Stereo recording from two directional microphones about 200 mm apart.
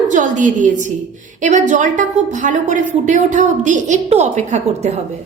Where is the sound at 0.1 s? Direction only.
40° right (ahead or behind).